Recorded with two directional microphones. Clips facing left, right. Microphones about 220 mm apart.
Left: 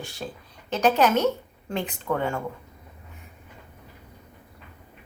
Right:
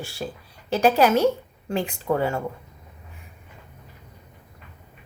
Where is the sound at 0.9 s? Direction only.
10° right (ahead or behind).